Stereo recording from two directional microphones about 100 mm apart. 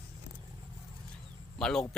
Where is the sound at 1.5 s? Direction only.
5° left (ahead or behind).